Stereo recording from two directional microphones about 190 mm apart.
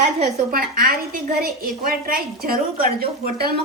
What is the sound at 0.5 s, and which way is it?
A woman's voice, 50° right (ahead or behind).